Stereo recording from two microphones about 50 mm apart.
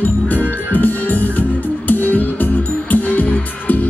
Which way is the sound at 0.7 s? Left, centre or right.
Left.